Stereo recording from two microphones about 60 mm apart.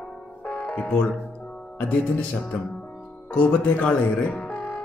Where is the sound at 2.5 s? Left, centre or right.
Centre.